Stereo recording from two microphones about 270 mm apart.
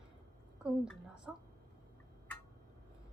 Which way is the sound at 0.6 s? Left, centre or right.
Centre.